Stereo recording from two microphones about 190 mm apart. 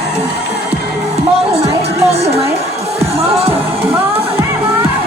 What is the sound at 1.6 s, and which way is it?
Music, 30° right (ahead or behind).